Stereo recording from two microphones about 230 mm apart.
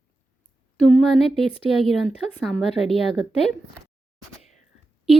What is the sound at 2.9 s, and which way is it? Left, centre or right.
Speech, left.